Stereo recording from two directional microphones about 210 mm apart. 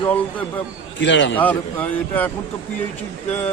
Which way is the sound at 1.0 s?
60° left (ahead or behind).